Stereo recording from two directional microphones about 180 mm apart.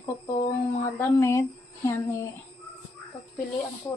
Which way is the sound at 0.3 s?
40° left (ahead or behind).